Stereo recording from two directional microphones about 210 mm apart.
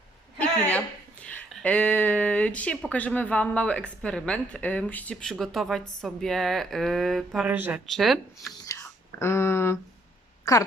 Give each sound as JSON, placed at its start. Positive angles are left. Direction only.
{"t": 1.2, "sound": "speech", "side_deg": 5}
{"t": 8.6, "sound": "whispering", "side_deg": 15}
{"t": 10.5, "sound": "speech", "side_deg": 15}